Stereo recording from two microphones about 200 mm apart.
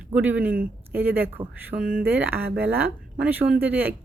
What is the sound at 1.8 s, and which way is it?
Speech, 45° right (ahead or behind).